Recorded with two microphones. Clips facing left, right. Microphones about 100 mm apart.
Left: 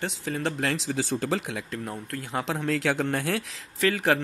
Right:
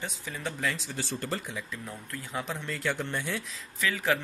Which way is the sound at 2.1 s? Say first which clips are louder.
Left 5 dB; 80° left.